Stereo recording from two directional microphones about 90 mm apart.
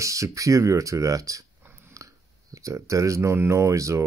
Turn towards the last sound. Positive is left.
turn(degrees=-35)  # may be behind; listen again after turning